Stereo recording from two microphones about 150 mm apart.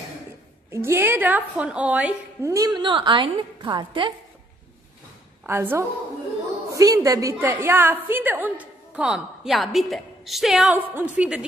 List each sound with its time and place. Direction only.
0.7 s a woman's voice: 15° right (ahead or behind)
2.5 s a woman's voice: 25° right (ahead or behind)
5.5 s a woman's voice: 15° right (ahead or behind)